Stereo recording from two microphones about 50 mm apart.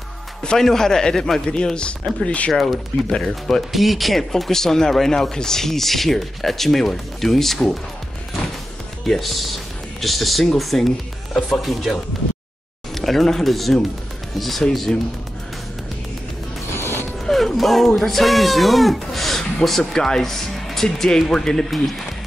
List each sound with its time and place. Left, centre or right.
0.4 s speech: centre
1.5 s speech: centre
2.5 s speech: centre
9.0 s speech: centre
17.3 s speech: centre